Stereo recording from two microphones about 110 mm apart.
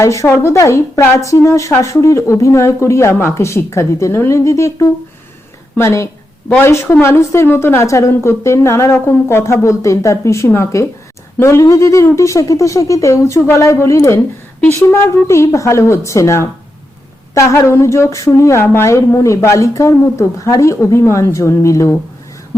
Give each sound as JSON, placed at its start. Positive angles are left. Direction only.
{"t": 0.0, "sound": "a woman's voice", "side_deg": 25}